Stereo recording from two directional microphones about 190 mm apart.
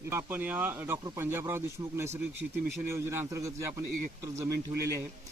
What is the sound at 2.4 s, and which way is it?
Speech, 25° right (ahead or behind).